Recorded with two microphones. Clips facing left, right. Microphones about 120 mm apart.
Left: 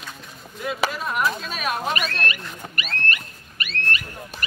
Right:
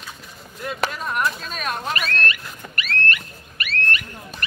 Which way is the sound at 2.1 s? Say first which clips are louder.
Right 2 dB; 20° left (ahead or behind).